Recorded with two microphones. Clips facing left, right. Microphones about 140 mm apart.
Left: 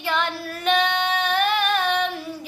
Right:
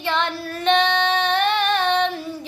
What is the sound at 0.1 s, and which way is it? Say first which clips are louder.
Female singing: right 1 dB; 5° left (ahead or behind).